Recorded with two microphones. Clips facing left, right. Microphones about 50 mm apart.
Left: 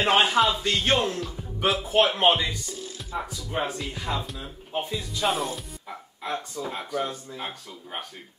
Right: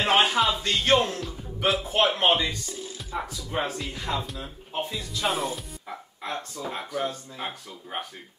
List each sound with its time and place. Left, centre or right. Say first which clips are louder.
0.0 s speech: left 1 dB; centre